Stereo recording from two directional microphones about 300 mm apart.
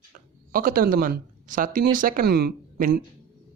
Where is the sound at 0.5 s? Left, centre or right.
Right.